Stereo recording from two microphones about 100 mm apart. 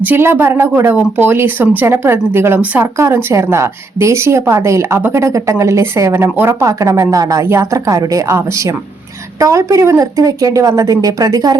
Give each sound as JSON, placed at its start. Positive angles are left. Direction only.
{"t": 0.0, "sound": "a woman's voice", "side_deg": -20}